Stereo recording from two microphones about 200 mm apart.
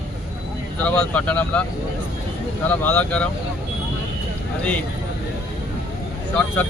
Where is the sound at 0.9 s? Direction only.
5° left (ahead or behind).